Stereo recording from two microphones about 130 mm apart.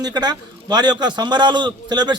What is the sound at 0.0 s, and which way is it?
A man's voice, 30° right (ahead or behind).